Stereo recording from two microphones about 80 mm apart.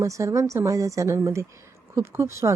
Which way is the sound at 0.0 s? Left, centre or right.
Right.